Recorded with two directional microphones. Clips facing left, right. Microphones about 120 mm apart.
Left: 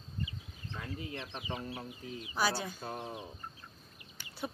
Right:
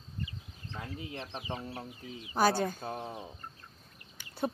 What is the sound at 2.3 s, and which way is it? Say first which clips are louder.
Speech: right 6 dB; 50° right (ahead or behind).